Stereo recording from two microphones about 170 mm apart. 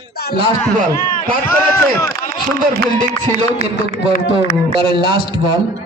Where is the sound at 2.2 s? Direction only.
50° left (ahead or behind).